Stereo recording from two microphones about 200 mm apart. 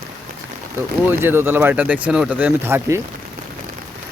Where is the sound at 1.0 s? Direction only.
10° right (ahead or behind).